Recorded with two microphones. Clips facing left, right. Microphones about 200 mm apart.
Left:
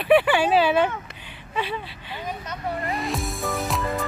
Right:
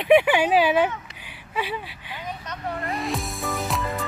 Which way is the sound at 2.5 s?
Centre (ahead or behind).